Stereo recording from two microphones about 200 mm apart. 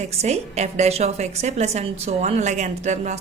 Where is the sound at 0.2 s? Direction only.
35° right (ahead or behind).